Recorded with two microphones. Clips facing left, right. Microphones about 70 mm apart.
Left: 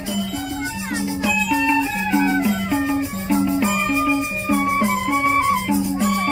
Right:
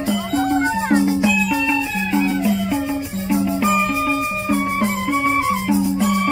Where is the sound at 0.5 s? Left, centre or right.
Right.